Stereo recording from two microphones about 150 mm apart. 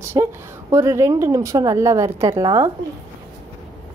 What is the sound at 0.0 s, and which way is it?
A woman's voice, 15° right (ahead or behind).